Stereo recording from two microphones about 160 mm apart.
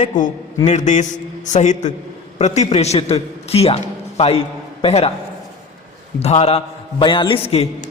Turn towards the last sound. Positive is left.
turn(degrees=40)  # may be behind; listen again after turning